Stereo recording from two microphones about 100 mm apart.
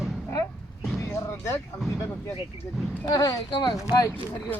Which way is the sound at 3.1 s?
40° left (ahead or behind).